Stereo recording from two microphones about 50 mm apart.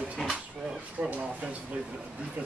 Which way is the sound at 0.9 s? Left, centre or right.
Right.